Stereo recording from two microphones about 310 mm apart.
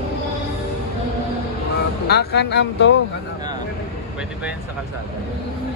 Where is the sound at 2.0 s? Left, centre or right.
Left.